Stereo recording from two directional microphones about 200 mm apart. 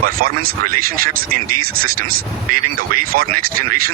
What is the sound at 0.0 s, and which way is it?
Speech, 50° right (ahead or behind).